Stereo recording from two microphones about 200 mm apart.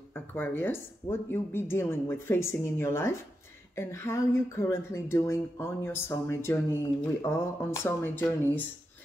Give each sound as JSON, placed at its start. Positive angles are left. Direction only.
{"t": 0.1, "sound": "speech", "side_deg": 10}